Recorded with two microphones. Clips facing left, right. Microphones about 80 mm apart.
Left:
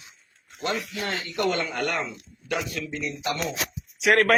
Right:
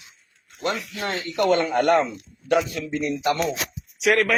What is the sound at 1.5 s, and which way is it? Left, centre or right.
Speech, right.